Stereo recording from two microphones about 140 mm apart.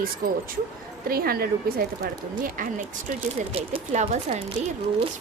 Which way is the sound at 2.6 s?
70° right (ahead or behind).